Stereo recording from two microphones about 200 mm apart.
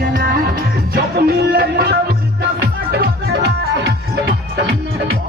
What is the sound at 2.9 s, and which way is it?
Music, 55° right (ahead or behind).